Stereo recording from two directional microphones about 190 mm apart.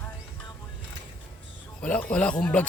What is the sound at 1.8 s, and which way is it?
Speech, 5° left (ahead or behind).